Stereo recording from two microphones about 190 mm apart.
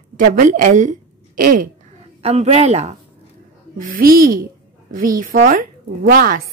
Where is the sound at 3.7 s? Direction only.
45° right (ahead or behind).